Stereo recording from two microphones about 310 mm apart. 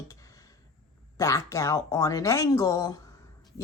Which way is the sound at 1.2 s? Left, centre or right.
Centre.